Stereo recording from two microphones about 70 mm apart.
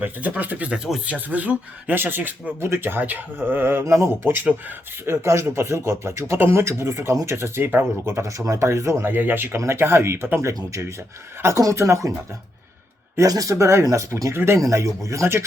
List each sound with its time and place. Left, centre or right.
0.0 s speech: right
2.6 s speech: right
5.0 s speech: right
9.0 s speech: right
10.5 s speech: right
13.2 s speech: right
14.6 s speech: right